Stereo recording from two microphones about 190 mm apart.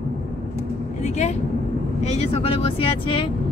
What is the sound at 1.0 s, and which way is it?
Speech, 35° left (ahead or behind).